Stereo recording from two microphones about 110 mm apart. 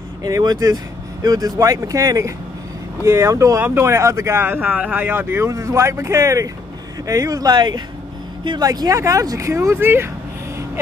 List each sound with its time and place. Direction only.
0.2 s speech: 35° right (ahead or behind); by 10.1 s 20° right (ahead or behind)